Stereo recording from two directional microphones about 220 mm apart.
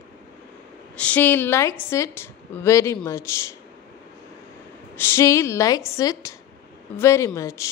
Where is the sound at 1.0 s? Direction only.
5° left (ahead or behind).